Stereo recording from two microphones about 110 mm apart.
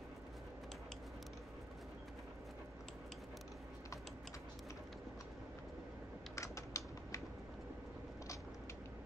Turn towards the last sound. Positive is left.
turn(degrees=30)  # may be behind; listen again after turning